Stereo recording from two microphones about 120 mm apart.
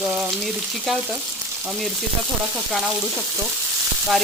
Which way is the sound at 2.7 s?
Centre (ahead or behind).